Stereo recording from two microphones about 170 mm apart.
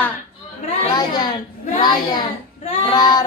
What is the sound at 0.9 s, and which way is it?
A child's voice, 25° left (ahead or behind).